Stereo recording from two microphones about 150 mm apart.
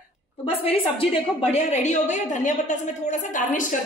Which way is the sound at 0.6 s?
40° left (ahead or behind).